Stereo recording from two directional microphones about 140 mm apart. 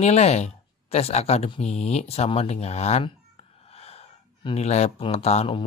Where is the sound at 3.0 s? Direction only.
45° left (ahead or behind).